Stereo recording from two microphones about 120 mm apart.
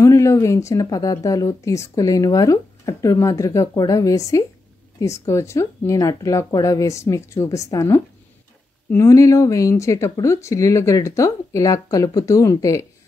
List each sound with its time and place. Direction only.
0.0 s speech: 25° left (ahead or behind)